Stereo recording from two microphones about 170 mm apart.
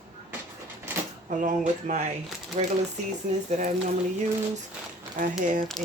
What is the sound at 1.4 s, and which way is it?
A woman's voice, 45° right (ahead or behind).